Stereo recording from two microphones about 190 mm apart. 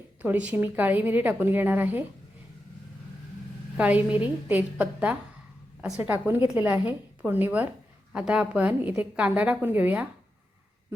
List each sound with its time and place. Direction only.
0.2 s a woman's voice: 10° right (ahead or behind)
3.8 s a woman's voice: 5° right (ahead or behind)